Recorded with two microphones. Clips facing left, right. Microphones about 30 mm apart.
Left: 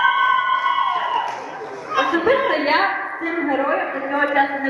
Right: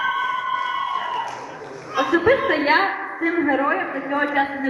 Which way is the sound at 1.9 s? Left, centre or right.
Centre.